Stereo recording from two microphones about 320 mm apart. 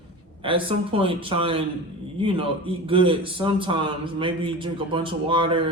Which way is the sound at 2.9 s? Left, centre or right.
Centre.